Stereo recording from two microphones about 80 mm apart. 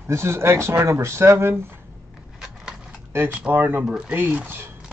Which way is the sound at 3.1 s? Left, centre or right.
Right.